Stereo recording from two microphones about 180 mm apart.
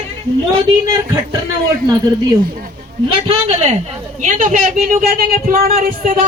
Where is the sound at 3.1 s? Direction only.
35° right (ahead or behind); by 6.1 s 50° right (ahead or behind).